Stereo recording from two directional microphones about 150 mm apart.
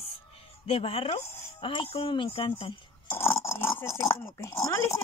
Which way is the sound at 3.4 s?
20° left (ahead or behind).